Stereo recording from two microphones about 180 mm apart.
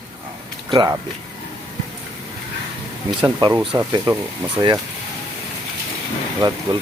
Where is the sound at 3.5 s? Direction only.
Centre (ahead or behind).